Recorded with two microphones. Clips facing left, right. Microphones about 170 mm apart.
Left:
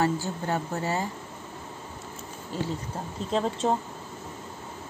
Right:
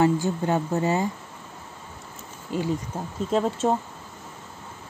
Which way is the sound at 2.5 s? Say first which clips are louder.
Right 5 dB; 15° right (ahead or behind).